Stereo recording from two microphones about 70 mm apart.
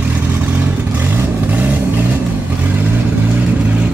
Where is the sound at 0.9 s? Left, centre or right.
Right.